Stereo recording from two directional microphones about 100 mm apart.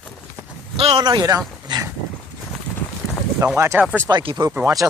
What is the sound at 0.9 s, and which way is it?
Speech, 45° right (ahead or behind).